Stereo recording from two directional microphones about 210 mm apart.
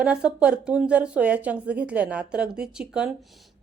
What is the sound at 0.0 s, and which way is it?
A woman's voice, 5° right (ahead or behind).